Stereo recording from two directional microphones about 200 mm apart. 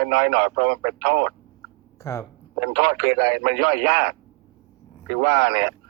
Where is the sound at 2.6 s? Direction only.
50° right (ahead or behind).